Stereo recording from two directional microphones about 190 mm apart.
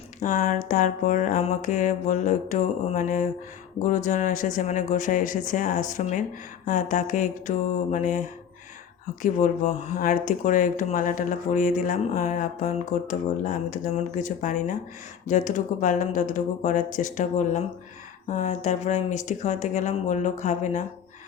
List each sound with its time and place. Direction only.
0.2 s speech: 45° left (ahead or behind)